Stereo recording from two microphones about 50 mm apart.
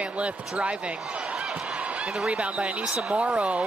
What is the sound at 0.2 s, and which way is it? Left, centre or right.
Speech, right.